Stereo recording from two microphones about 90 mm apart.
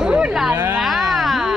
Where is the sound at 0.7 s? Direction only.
Centre (ahead or behind).